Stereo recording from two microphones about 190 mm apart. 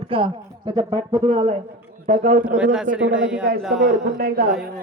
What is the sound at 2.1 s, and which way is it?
Speech, 40° right (ahead or behind).